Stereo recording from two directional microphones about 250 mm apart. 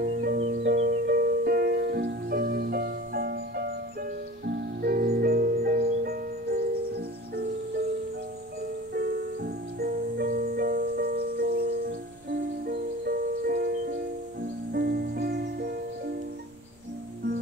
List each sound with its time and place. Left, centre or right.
0.0 s music: right
8.9 s music: right